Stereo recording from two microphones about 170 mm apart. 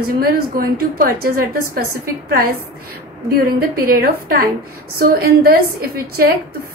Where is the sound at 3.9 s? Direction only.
60° right (ahead or behind).